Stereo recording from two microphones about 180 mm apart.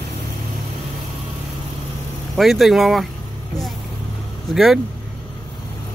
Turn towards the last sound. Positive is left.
turn(degrees=0)  # may be behind; listen again after turning